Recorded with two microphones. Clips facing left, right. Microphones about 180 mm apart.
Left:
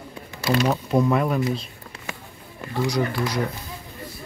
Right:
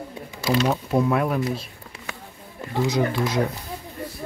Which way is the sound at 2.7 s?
20° right (ahead or behind).